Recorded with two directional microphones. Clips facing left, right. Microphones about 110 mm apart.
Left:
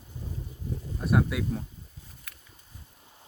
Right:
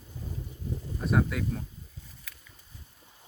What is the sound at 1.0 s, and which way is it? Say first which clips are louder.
Speech: left 1 dB; 5° left (ahead or behind).